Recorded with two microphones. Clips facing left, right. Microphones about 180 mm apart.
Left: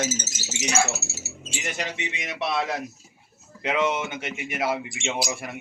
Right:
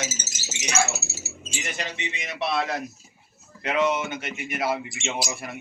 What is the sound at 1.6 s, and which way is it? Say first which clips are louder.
Speech: left 2 dB; 10° left (ahead or behind).